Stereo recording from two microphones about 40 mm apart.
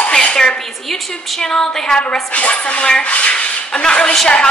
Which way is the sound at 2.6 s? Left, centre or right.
Left.